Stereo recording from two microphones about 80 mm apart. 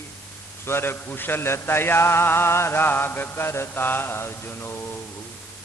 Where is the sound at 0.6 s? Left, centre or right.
Left.